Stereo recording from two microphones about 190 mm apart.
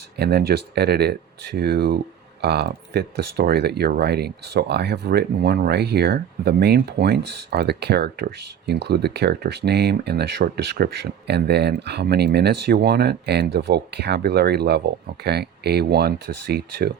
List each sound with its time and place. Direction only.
0.2 s speech: 60° right (ahead or behind)